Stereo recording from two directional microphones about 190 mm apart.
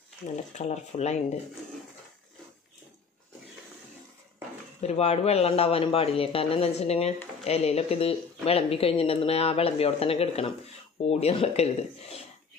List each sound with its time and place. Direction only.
0.6 s speech: 35° left (ahead or behind)
4.8 s speech: 35° left (ahead or behind)